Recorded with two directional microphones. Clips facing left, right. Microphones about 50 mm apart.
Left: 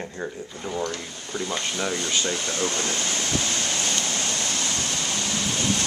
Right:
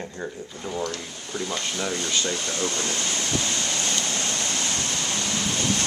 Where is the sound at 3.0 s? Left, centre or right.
Left.